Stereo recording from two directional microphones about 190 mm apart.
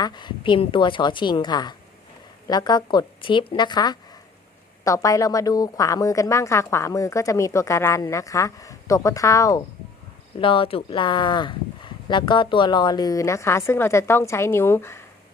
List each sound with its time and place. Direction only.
0.0 s speech: 25° left (ahead or behind)